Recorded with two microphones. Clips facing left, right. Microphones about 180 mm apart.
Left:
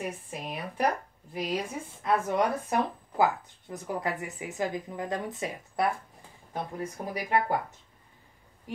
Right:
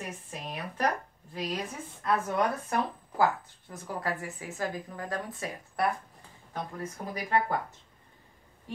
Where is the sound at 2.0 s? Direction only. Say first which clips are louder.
Left 2 dB; 20° left (ahead or behind).